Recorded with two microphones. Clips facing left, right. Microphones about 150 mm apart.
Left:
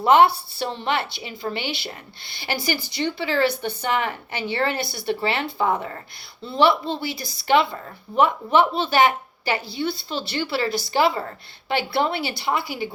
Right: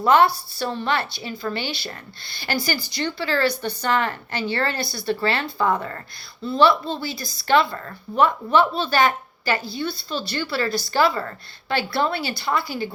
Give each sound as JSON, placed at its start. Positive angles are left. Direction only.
{"t": 0.0, "sound": "a woman's voice", "side_deg": 20}
{"t": 3.0, "sound": "speech", "side_deg": 15}
{"t": 6.4, "sound": "a woman's voice", "side_deg": 25}